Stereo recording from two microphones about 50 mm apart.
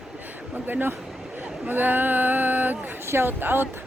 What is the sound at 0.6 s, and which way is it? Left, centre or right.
Speech, right.